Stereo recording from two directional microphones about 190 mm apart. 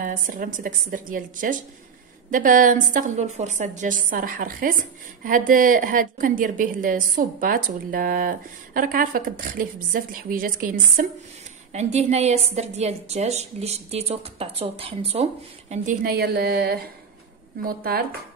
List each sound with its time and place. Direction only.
0.0 s a woman's voice: 45° right (ahead or behind)
11.7 s a woman's voice: 35° right (ahead or behind)
15.7 s a woman's voice: 40° right (ahead or behind)